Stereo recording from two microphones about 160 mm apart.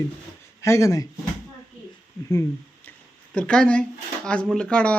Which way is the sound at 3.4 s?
5° left (ahead or behind).